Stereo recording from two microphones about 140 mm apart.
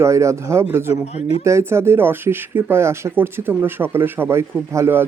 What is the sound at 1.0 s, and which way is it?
Speech, 50° left (ahead or behind).